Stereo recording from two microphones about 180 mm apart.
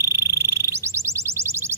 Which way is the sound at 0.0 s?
15° right (ahead or behind).